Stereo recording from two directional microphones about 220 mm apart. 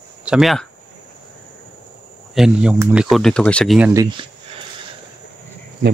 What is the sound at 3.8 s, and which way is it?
Speech, 15° right (ahead or behind).